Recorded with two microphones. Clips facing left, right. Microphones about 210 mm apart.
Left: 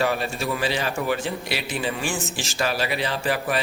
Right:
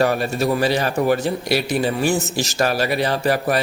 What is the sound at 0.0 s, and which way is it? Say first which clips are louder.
Speech: right 6 dB; 45° right (ahead or behind).